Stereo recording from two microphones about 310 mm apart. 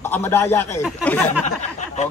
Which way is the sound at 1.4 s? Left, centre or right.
Left.